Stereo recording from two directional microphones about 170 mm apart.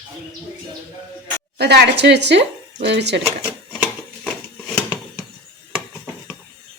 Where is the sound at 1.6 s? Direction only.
80° right.